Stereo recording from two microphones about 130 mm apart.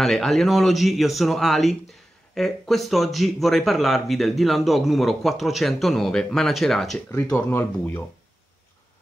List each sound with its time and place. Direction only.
0.0 s speech: centre (ahead or behind); by 8.0 s 20° left (ahead or behind)